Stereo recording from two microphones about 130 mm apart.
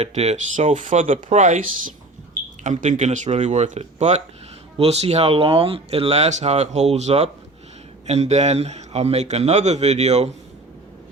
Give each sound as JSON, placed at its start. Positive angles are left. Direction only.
{"t": 0.0, "sound": "a man's voice", "side_deg": -55}